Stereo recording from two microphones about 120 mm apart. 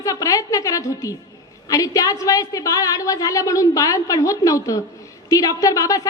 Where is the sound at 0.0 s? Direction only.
30° left (ahead or behind).